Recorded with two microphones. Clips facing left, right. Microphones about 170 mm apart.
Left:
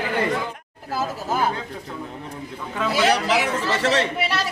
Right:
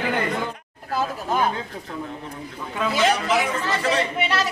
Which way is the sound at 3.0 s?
70° left (ahead or behind).